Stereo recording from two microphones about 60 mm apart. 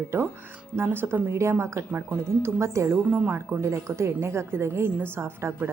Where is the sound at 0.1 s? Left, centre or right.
Right.